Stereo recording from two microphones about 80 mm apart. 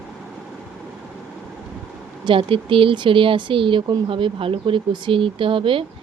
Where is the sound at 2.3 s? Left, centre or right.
Right.